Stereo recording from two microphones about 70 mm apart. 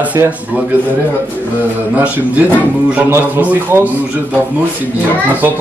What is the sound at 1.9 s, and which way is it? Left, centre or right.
A man's voice, right.